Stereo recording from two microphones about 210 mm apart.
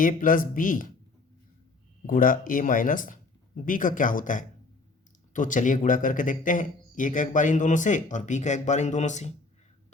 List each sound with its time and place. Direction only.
0.0 s a man's voice: 40° left (ahead or behind)
2.0 s a man's voice: 40° left (ahead or behind)